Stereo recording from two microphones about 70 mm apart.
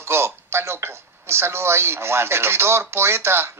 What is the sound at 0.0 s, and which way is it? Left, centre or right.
Speech, right.